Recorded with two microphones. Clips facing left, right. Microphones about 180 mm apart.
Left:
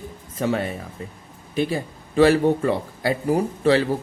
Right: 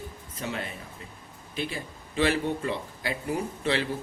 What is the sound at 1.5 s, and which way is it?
Speech, 45° left (ahead or behind).